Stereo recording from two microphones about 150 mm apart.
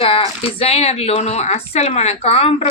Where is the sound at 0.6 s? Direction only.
45° left (ahead or behind).